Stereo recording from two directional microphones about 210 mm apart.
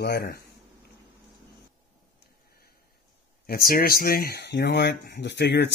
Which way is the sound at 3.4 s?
45° left (ahead or behind).